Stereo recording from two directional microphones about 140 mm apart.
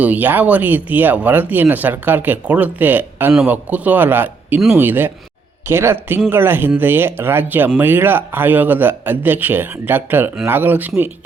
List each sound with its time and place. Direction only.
0.0 s a man's voice: 10° right (ahead or behind)